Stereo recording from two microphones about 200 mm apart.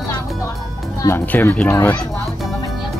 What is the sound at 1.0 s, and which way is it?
Speech, 10° left (ahead or behind).